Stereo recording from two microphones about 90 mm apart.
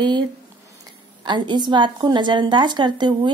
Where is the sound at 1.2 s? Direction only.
55° right (ahead or behind).